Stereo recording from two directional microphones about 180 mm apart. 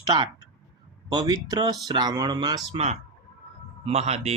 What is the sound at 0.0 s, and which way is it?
Speech, 25° right (ahead or behind).